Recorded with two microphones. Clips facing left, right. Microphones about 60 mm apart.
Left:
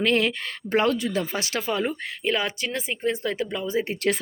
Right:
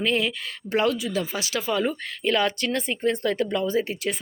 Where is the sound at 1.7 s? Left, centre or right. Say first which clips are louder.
Right 3 dB; left.